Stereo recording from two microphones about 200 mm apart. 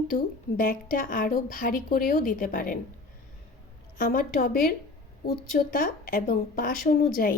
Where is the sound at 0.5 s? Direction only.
45° left (ahead or behind).